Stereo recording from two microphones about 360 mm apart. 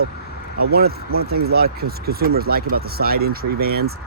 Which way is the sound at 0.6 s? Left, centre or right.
Right.